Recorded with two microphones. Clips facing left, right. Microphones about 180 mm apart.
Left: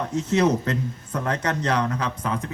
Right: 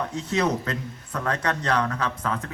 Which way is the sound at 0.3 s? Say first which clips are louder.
Left 4 dB; 25° left (ahead or behind).